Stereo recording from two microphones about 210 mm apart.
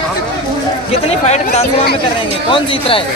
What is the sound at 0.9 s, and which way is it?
Speech, 30° left (ahead or behind).